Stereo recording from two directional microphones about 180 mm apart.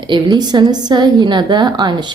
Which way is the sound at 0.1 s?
25° right (ahead or behind).